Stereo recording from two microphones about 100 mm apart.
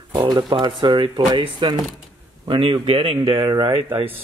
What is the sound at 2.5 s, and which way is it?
A man's voice, 60° right (ahead or behind).